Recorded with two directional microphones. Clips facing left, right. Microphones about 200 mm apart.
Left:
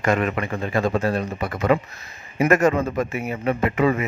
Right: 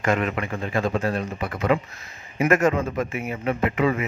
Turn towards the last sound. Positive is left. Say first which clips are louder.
# left 2 dB
turn(degrees=40)  # may be behind; listen again after turning